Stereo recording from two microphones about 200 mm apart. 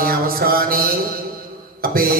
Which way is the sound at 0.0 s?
50° right (ahead or behind).